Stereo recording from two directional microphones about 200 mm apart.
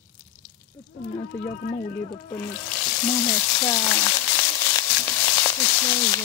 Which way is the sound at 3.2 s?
15° left (ahead or behind).